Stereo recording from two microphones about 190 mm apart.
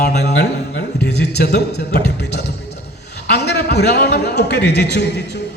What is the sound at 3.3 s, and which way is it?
A man's voice, 60° left (ahead or behind).